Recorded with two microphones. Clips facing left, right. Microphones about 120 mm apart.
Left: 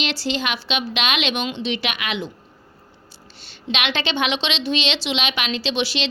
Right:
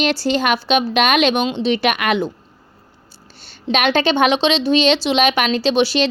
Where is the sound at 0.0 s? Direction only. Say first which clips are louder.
Right 7 dB; 45° right (ahead or behind).